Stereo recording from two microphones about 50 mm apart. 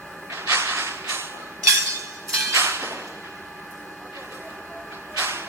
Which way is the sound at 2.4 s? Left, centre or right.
Right.